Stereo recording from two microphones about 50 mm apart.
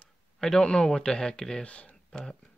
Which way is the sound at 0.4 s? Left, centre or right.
Centre.